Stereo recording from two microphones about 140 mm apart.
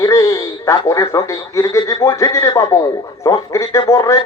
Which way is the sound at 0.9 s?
20° left (ahead or behind).